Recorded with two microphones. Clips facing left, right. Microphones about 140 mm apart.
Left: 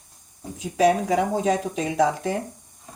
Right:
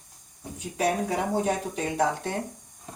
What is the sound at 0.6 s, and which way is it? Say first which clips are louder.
Speech: left 7 dB; 90° left.